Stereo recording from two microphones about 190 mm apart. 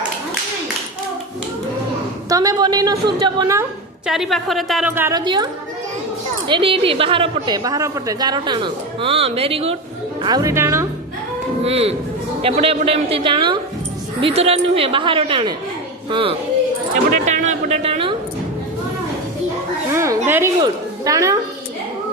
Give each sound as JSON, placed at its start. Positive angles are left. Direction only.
{"t": 2.3, "sound": "a woman's voice", "side_deg": -20}
{"t": 4.0, "sound": "a woman's voice", "side_deg": 0}
{"t": 4.9, "sound": "speech", "side_deg": -15}
{"t": 5.2, "sound": "a woman's voice", "side_deg": -25}
{"t": 6.5, "sound": "a woman's voice", "side_deg": -30}
{"t": 10.2, "sound": "speech", "side_deg": -20}
{"t": 11.6, "sound": "a woman's voice", "side_deg": -30}
{"t": 17.2, "sound": "a sound", "side_deg": -40}
{"t": 19.9, "sound": "a sound", "side_deg": -15}
{"t": 20.2, "sound": "a woman's voice", "side_deg": -10}